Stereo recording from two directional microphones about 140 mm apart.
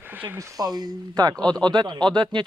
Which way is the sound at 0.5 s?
30° right (ahead or behind).